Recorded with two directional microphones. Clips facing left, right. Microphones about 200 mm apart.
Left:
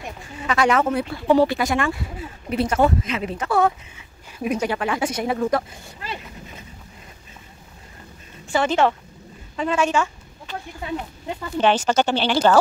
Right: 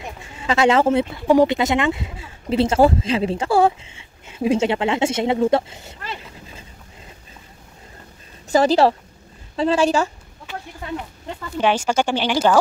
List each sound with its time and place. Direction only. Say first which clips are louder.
0.2 s speech: right 3 dB; 25° right (ahead or behind)
1.2 s speech: right 1 dB; 15° right (ahead or behind)
8.5 s a woman's voice: right 4 dB; 35° right (ahead or behind)
11.5 s speech: even; 10° right (ahead or behind)